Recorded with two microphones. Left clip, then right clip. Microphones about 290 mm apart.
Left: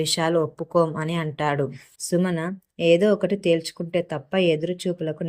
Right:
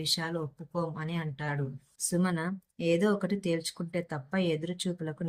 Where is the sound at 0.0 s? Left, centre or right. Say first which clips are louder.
Left 11 dB; centre.